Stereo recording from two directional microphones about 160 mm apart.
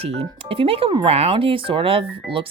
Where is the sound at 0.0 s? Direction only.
40° right (ahead or behind).